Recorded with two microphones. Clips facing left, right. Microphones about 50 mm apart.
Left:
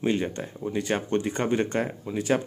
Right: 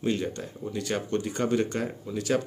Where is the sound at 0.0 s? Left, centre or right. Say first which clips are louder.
Left 2 dB; left.